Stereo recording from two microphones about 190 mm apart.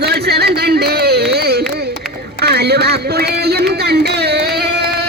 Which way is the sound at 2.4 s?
60° right (ahead or behind).